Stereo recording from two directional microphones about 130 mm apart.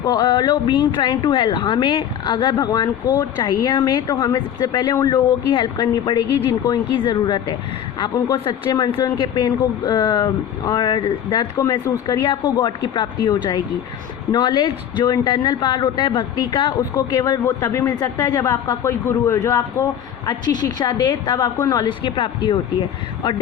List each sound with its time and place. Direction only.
0.0 s speech: 30° left (ahead or behind)
17.2 s speech: 25° left (ahead or behind)